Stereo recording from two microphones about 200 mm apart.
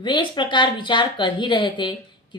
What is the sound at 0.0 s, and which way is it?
Speech, 20° left (ahead or behind).